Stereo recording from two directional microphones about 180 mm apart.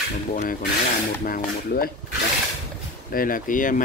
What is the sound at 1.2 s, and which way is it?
Speech, 55° left (ahead or behind).